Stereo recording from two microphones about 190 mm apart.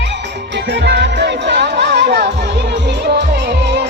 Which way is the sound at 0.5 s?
65° right (ahead or behind).